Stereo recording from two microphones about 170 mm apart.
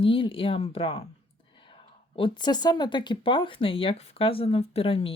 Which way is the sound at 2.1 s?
30° left (ahead or behind).